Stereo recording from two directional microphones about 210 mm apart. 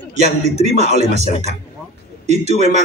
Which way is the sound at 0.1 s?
30° right (ahead or behind).